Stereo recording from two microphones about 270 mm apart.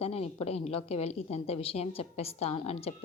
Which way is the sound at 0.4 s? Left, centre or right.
Left.